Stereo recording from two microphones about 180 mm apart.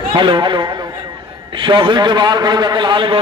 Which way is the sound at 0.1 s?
25° right (ahead or behind).